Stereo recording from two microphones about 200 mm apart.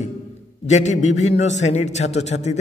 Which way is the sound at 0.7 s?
35° left (ahead or behind).